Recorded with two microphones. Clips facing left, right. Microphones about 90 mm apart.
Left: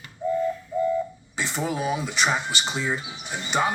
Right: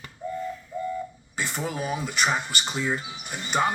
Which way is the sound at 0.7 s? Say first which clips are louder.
Left 7 dB; centre (ahead or behind).